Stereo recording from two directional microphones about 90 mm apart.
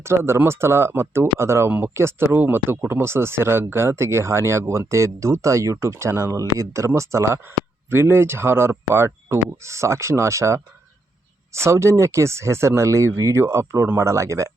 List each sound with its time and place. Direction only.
0.0 s speech: 30° right (ahead or behind)